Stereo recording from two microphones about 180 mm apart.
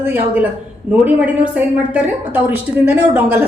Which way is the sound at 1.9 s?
10° right (ahead or behind).